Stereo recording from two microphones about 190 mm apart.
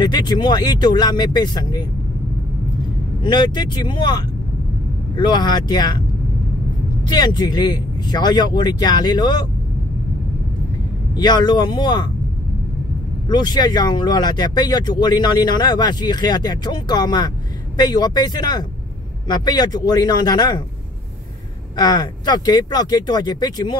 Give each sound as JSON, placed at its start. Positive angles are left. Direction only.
{"t": 0.0, "sound": "speech", "side_deg": 20}
{"t": 3.3, "sound": "speech", "side_deg": 25}
{"t": 7.1, "sound": "speech", "side_deg": 20}
{"t": 11.1, "sound": "speech", "side_deg": 20}
{"t": 13.3, "sound": "speech", "side_deg": 20}
{"t": 21.7, "sound": "speech", "side_deg": 20}